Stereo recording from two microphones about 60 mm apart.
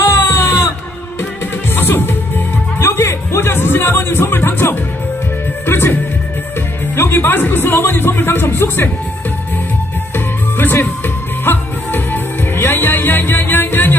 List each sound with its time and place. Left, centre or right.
0.1 s music: left
1.8 s music: left
7.0 s music: left
10.1 s music: left